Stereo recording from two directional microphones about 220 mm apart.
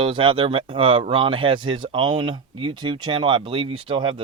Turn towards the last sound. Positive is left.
turn(degrees=-20)  # may be behind; listen again after turning